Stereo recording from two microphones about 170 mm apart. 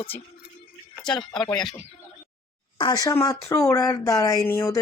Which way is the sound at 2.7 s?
25° left (ahead or behind).